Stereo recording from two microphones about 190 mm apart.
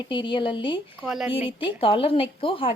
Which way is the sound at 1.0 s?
Centre (ahead or behind).